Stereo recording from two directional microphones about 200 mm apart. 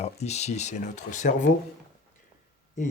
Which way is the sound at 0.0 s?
35° left (ahead or behind).